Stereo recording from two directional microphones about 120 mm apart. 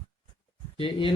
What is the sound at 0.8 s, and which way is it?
Speech, 45° left (ahead or behind).